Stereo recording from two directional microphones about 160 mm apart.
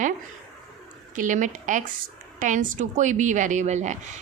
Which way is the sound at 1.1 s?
50° right (ahead or behind).